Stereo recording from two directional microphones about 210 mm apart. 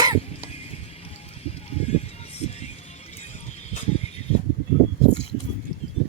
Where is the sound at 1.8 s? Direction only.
30° left (ahead or behind).